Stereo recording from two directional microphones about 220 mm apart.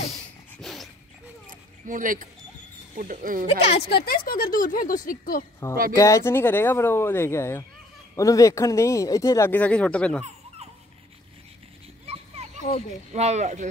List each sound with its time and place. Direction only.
0.6 s dog: centre (ahead or behind)
1.5 s a sound: 40° right (ahead or behind)
3.0 s speech: 40° right (ahead or behind)
3.7 s speech: 45° left (ahead or behind)
5.6 s speech: 15° left (ahead or behind)
12.1 s a sound: 30° right (ahead or behind)
13.1 s speech: 30° right (ahead or behind)